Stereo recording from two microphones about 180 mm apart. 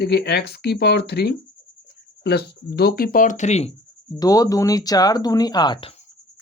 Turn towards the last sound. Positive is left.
turn(degrees=25)  # may be behind; listen again after turning